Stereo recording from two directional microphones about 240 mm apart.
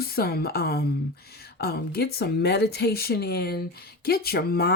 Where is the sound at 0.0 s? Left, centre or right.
Left.